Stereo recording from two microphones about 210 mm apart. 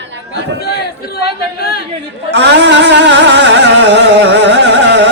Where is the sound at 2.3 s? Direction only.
55° right (ahead or behind).